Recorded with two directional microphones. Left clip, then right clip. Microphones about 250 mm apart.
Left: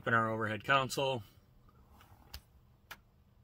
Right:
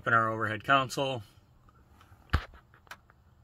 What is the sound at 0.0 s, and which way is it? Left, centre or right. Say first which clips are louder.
Speech: right 5 dB; right.